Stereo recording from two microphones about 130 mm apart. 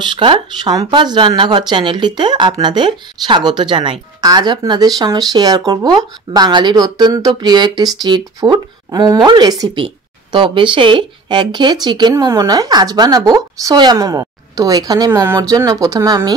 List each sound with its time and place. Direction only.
0.0 s speech: 40° right (ahead or behind)